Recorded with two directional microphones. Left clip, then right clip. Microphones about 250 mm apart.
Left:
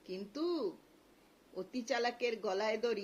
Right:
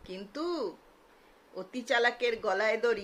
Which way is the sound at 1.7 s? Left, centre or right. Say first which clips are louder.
Right 8 dB; centre.